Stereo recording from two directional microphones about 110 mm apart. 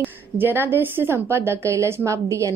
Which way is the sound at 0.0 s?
20° right (ahead or behind).